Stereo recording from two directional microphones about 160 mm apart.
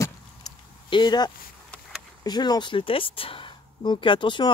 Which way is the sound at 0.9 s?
30° left (ahead or behind).